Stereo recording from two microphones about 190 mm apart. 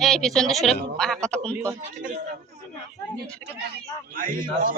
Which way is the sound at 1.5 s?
15° right (ahead or behind).